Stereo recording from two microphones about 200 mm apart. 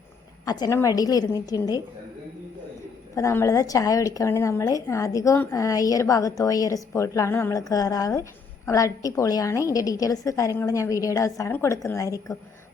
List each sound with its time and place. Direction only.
0.4 s a woman's voice: 20° left (ahead or behind)
3.2 s a woman's voice: 15° left (ahead or behind)